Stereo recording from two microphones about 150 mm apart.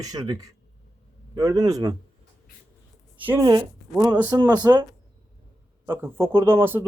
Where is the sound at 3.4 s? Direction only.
25° right (ahead or behind).